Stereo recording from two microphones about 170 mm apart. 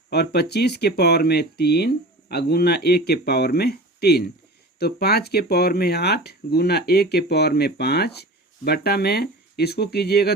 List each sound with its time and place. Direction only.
0.1 s speech: 70° left (ahead or behind)